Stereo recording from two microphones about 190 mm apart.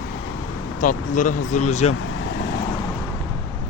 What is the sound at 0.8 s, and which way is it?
Speech, 45° left (ahead or behind).